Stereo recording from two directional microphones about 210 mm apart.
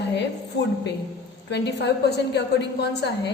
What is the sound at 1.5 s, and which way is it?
A woman's voice, 55° left (ahead or behind).